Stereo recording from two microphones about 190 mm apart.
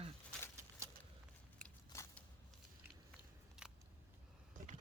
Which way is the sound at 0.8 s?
15° right (ahead or behind).